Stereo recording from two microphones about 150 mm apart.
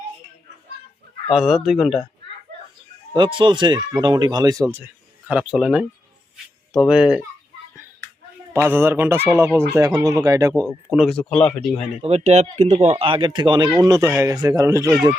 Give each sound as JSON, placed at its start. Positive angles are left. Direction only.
{"t": 1.3, "sound": "speech", "side_deg": -5}
{"t": 3.2, "sound": "speech", "side_deg": -35}
{"t": 8.6, "sound": "speech", "side_deg": -15}
{"t": 10.8, "sound": "speech", "side_deg": -5}
{"t": 11.1, "sound": "speech", "side_deg": 5}
{"t": 12.0, "sound": "speech", "side_deg": -45}